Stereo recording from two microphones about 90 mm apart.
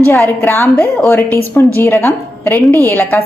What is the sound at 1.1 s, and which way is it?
A woman's voice, 25° left (ahead or behind).